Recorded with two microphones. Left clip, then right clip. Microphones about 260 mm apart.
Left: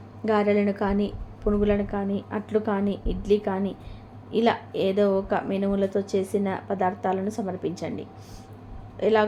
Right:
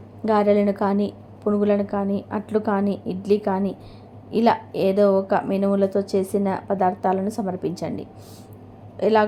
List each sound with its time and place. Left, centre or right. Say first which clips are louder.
0.3 s a woman's voice: right 4 dB; centre